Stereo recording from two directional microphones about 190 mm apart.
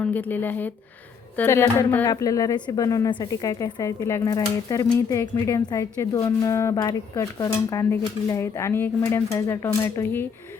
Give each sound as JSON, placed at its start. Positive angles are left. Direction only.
{"t": 0.0, "sound": "speech", "side_deg": 10}